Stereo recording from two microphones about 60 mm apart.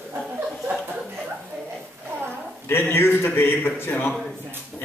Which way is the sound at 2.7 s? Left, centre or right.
Left.